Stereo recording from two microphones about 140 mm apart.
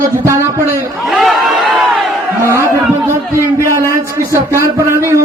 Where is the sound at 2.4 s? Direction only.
20° right (ahead or behind).